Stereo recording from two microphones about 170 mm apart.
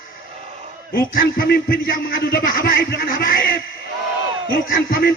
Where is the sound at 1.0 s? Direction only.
60° left (ahead or behind).